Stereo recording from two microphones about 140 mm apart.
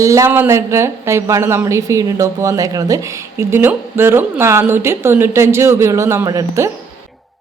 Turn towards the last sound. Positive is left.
turn(degrees=-20)  # may be behind; listen again after turning